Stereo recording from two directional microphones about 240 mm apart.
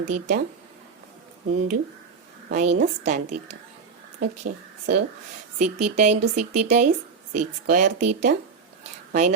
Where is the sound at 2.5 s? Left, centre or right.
Right.